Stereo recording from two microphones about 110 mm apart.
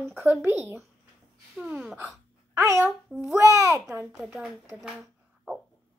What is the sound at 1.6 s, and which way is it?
Speech, 5° right (ahead or behind).